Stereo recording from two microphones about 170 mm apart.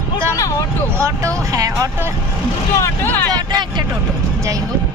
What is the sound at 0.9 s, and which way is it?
A woman's voice, 15° right (ahead or behind).